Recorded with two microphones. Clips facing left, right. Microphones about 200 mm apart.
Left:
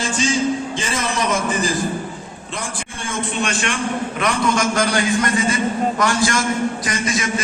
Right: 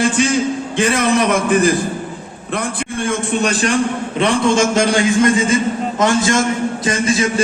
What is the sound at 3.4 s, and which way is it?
Speech, 35° right (ahead or behind).